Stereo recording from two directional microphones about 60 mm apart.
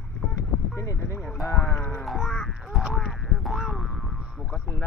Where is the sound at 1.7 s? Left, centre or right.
Left.